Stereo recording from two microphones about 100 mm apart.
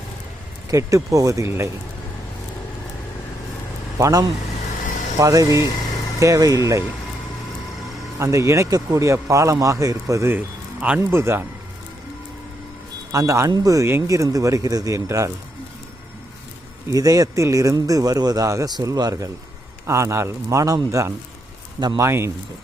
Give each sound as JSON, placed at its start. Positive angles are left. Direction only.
{"t": 0.7, "sound": "speech", "side_deg": -30}
{"t": 3.9, "sound": "speech", "side_deg": -35}
{"t": 8.2, "sound": "speech", "side_deg": -30}
{"t": 10.3, "sound": "a man's voice", "side_deg": -15}
{"t": 11.1, "sound": "speech", "side_deg": -25}
{"t": 13.1, "sound": "speech", "side_deg": -30}
{"t": 16.9, "sound": "speech", "side_deg": -35}